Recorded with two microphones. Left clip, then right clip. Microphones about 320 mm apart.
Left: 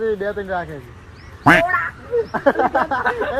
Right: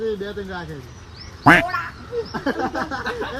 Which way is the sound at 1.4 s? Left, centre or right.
Centre.